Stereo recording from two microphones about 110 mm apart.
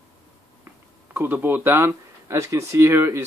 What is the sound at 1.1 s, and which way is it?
Speech, 20° right (ahead or behind).